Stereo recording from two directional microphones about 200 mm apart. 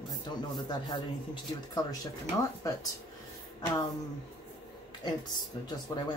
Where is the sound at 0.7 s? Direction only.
20° left (ahead or behind).